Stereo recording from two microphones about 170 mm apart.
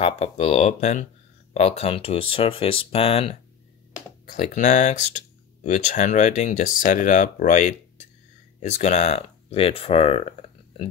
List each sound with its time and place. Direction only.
0.0 s speech: 40° left (ahead or behind)
4.4 s speech: 45° left (ahead or behind)